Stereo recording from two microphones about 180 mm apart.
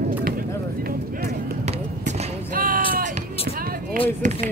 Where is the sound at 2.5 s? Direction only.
50° right (ahead or behind).